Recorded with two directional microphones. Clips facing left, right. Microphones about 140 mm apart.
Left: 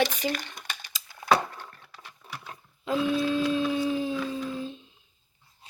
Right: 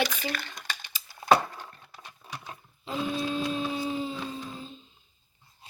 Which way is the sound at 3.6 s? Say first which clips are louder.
Left 4 dB; 75° left (ahead or behind).